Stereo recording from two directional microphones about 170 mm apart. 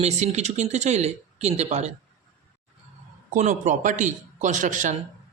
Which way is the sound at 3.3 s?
45° right (ahead or behind).